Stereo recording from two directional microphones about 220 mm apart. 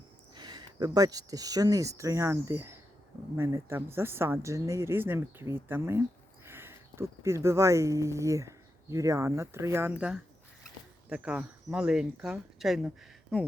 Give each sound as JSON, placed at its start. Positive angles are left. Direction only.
{"t": 0.3, "sound": "speech", "side_deg": -20}